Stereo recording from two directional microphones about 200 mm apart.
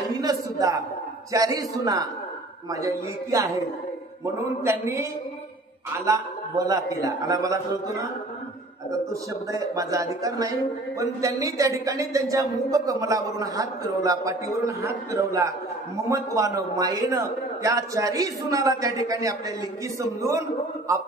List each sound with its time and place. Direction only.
0.1 s a woman's voice: 20° right (ahead or behind)
6.0 s a woman's voice: 15° right (ahead or behind)